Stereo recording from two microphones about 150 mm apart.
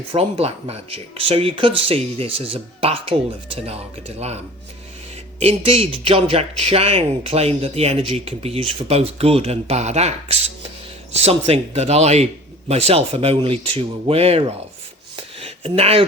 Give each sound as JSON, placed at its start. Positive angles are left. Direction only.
{"t": 0.1, "sound": "speech", "side_deg": -40}
{"t": 5.4, "sound": "speech", "side_deg": -40}
{"t": 15.1, "sound": "a sound", "side_deg": -40}